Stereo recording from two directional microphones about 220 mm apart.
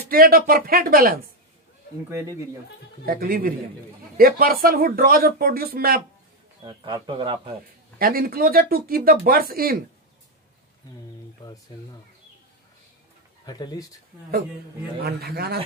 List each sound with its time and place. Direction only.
0.1 s speech: 40° right (ahead or behind)
2.0 s speech: 15° right (ahead or behind)
3.1 s speech: 40° right (ahead or behind)
6.6 s speech: 20° right (ahead or behind)
8.0 s speech: 40° right (ahead or behind)
13.5 s speech: 20° left (ahead or behind)
15.0 s speech: 45° right (ahead or behind)